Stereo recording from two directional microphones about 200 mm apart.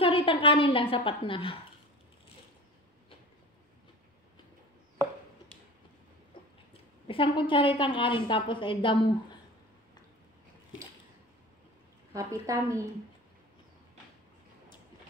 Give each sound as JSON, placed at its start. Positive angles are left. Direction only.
{"t": 0.0, "sound": "a woman's voice", "side_deg": 25}
{"t": 6.3, "sound": "a sound", "side_deg": 25}
{"t": 7.1, "sound": "a woman's voice", "side_deg": 25}
{"t": 12.1, "sound": "a woman's voice", "side_deg": -15}